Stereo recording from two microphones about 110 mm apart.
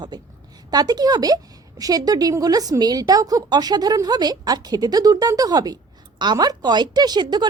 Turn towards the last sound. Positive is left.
turn(degrees=-40)  # may be behind; listen again after turning